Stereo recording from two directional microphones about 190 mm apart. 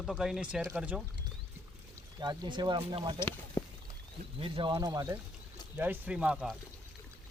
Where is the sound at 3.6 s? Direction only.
20° left (ahead or behind).